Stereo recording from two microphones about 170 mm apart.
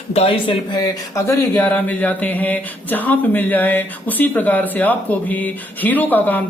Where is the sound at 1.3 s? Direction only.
10° left (ahead or behind).